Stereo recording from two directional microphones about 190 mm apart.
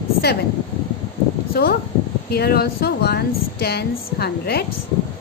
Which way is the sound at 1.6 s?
55° left (ahead or behind).